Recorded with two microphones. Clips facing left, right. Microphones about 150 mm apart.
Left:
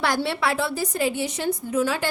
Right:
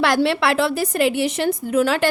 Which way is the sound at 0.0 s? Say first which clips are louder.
Right 6 dB; 90° right.